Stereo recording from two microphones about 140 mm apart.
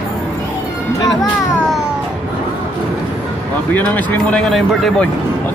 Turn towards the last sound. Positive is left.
turn(degrees=0)  # may be behind; listen again after turning